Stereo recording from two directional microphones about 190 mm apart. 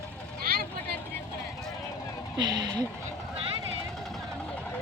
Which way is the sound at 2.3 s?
20° right (ahead or behind).